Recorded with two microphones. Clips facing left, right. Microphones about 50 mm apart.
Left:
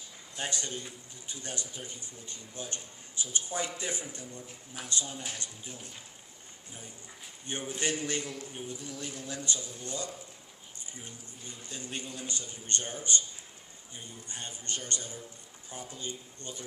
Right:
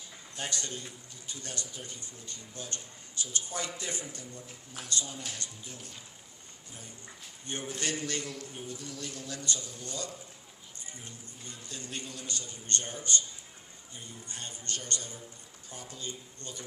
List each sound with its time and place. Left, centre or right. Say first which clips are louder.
0.3 s a man's voice: left 1 dB; left
7.7 s a man's voice: left 2 dB; left